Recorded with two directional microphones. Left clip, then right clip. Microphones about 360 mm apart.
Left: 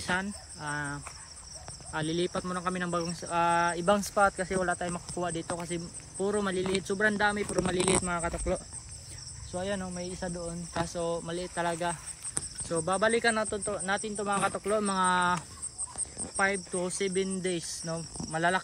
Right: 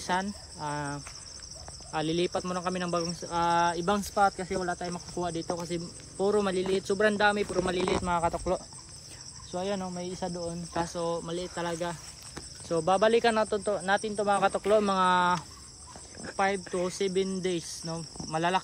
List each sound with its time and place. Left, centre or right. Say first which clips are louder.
0.0 s cricket: right 1 dB; centre
1.9 s speech: right 2 dB; centre